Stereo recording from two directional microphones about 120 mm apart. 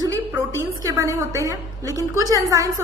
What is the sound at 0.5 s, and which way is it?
A woman's voice, 25° right (ahead or behind).